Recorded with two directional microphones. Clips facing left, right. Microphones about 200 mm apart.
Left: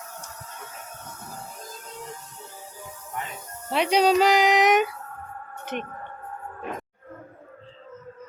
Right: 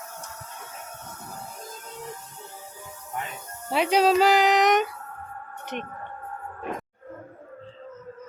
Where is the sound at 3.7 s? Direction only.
5° right (ahead or behind).